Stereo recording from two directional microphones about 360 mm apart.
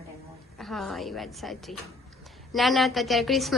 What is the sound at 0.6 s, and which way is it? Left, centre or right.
A woman's voice, centre.